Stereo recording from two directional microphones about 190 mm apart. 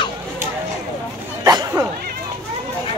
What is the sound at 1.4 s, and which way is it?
Dog, 20° right (ahead or behind).